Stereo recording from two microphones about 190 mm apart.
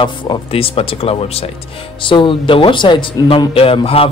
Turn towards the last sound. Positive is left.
turn(degrees=30)  # may be behind; listen again after turning